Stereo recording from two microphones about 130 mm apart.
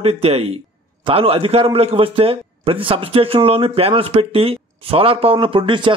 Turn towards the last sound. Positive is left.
turn(degrees=-40)  # may be behind; listen again after turning